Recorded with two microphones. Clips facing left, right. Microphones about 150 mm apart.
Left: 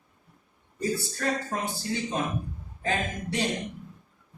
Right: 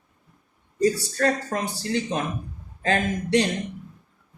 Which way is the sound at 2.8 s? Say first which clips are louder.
Right 6 dB; 75° right (ahead or behind).